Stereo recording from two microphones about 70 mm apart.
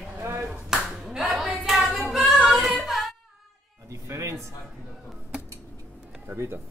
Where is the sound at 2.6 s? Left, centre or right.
Centre.